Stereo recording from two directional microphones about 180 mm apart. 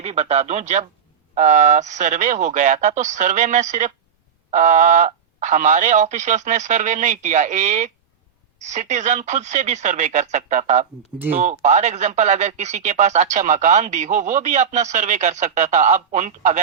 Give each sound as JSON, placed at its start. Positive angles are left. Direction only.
{"t": 0.0, "sound": "speech", "side_deg": -35}